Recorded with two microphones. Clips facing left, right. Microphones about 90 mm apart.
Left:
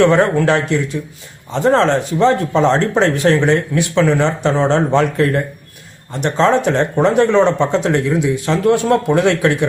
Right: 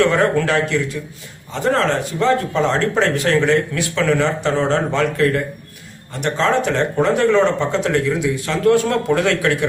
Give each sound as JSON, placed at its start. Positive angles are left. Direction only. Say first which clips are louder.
{"t": 0.0, "sound": "speech", "louder": "left 4 dB", "side_deg": 25}